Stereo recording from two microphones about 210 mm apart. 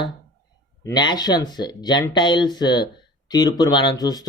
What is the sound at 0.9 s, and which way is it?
Speech, 20° left (ahead or behind).